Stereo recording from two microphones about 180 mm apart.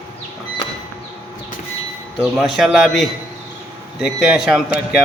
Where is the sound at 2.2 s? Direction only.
Centre (ahead or behind).